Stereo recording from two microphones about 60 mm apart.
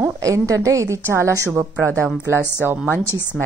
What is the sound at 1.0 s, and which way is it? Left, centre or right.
Speech, right.